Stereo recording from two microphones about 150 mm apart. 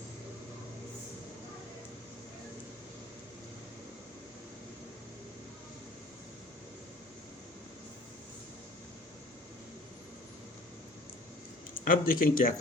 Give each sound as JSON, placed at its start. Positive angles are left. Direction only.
{"t": 11.9, "sound": "speech", "side_deg": 65}